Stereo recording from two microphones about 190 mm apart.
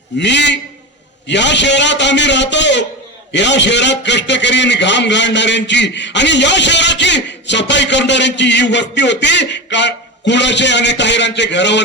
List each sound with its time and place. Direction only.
0.2 s a man's voice: 65° left (ahead or behind)